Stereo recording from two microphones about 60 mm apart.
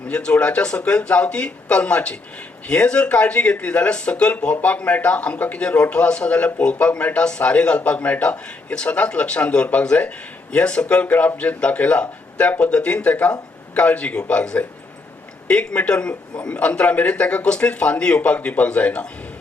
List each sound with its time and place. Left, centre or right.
0.1 s a man's voice: centre